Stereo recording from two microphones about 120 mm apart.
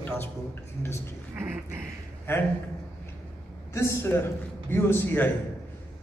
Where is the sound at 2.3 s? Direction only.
15° left (ahead or behind).